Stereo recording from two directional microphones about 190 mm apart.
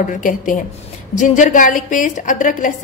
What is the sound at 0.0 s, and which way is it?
A woman's voice, 45° left (ahead or behind).